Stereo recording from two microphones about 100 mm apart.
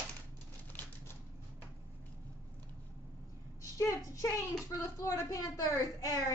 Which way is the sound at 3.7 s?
30° left (ahead or behind).